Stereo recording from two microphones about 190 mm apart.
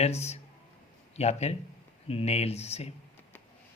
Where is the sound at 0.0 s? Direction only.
35° left (ahead or behind).